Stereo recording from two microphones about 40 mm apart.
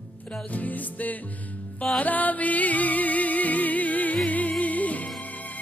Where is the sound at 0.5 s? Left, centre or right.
Left.